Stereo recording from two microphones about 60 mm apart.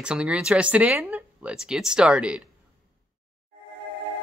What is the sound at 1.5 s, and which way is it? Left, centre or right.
Speech, centre.